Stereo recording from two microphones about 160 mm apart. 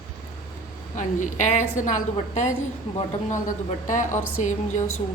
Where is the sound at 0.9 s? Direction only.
50° left (ahead or behind).